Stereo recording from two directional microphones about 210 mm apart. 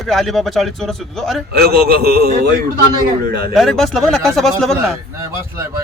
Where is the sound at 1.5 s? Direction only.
50° right (ahead or behind).